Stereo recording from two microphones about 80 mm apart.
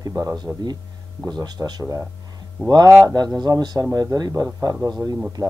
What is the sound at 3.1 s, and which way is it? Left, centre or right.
Speech, right.